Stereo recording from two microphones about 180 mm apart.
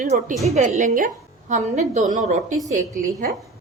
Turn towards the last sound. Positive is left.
turn(degrees=-45)  # may be behind; listen again after turning